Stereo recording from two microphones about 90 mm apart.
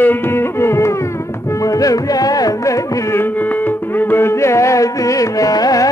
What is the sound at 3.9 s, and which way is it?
Music, 25° left (ahead or behind).